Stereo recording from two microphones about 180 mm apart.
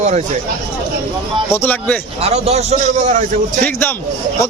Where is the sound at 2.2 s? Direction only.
35° right (ahead or behind).